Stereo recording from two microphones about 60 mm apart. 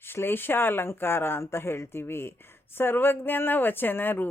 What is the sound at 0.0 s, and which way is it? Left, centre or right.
Speech, left.